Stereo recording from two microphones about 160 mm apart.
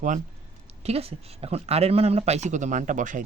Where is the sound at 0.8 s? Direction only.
40° right (ahead or behind).